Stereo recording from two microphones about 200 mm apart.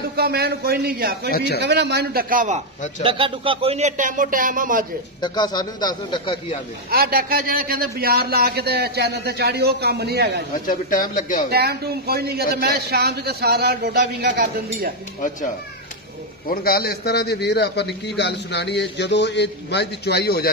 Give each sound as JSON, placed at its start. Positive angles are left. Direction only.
{"t": 0.1, "sound": "a man's voice", "side_deg": -50}
{"t": 3.0, "sound": "speech", "side_deg": -25}
{"t": 5.2, "sound": "speech", "side_deg": 20}
{"t": 6.9, "sound": "a man's voice", "side_deg": -50}
{"t": 10.7, "sound": "a man's voice", "side_deg": 45}
{"t": 11.5, "sound": "a man's voice", "side_deg": -50}
{"t": 16.4, "sound": "a man's voice", "side_deg": 50}